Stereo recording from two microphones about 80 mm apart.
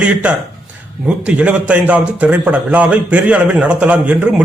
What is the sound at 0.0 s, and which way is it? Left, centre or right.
A man's voice, centre.